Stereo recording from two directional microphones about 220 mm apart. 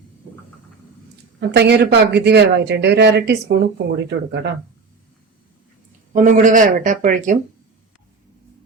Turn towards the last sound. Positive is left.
turn(degrees=-35)  # may be behind; listen again after turning